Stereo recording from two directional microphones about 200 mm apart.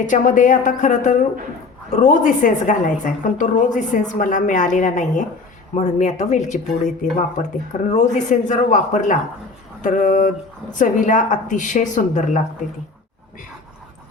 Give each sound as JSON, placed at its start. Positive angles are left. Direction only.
{"t": 0.0, "sound": "a woman's voice", "side_deg": 40}